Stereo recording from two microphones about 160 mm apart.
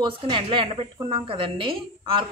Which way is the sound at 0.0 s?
35° right (ahead or behind).